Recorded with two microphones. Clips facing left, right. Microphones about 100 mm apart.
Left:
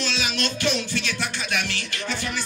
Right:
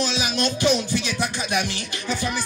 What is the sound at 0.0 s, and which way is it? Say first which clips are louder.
Speech: right 3 dB; 15° right (ahead or behind).